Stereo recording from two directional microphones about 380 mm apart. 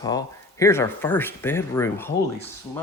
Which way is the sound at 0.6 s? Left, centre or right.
Centre.